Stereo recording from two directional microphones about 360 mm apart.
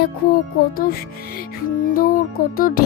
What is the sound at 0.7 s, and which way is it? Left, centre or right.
Music, left.